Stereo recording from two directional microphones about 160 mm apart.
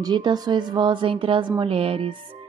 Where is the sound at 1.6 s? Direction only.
35° right (ahead or behind).